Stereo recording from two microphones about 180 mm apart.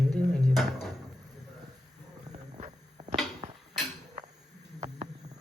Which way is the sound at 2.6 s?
35° right (ahead or behind).